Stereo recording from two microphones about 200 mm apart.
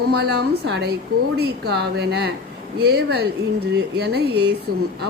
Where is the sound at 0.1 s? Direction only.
55° right (ahead or behind).